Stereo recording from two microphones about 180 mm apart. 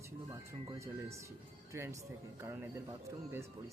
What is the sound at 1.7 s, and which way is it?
Speech, 15° right (ahead or behind).